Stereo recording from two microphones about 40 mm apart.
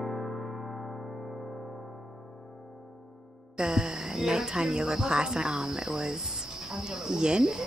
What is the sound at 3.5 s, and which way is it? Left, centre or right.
Speech, centre.